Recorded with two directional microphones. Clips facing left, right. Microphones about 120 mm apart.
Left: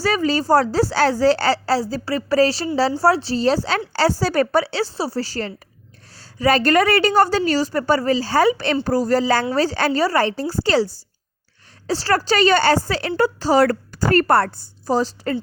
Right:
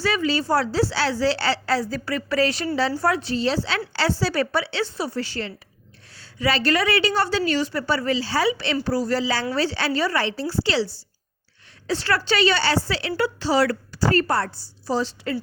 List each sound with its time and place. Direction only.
0.0 s a woman's voice: 40° left (ahead or behind)